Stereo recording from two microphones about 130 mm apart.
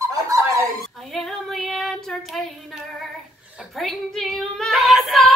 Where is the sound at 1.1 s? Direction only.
Centre (ahead or behind).